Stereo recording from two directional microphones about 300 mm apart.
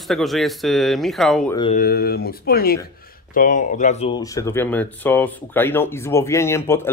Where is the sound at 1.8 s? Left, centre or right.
Left.